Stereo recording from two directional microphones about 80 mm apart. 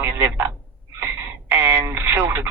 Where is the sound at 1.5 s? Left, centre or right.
Right.